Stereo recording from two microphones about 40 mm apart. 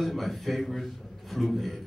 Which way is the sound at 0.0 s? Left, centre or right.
Centre.